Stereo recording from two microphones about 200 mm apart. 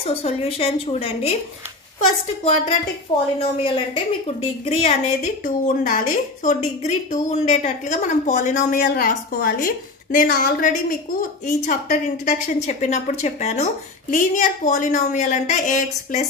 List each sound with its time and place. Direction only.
0.0 s a woman's voice: 30° left (ahead or behind)
3.3 s a woman's voice: 25° left (ahead or behind)